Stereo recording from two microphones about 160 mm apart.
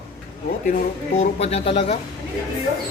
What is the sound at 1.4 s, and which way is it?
Speech, 40° left (ahead or behind).